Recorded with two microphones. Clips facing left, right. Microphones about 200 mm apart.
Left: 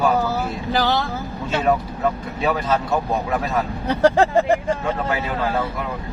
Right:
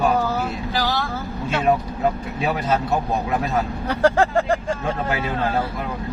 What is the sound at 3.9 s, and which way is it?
Speech, 20° left (ahead or behind).